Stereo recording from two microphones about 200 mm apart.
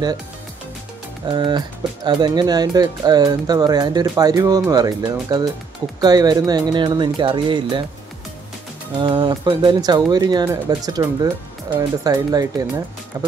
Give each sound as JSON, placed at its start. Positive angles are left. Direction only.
{"t": 1.2, "sound": "speech", "side_deg": -25}
{"t": 9.0, "sound": "speech", "side_deg": -20}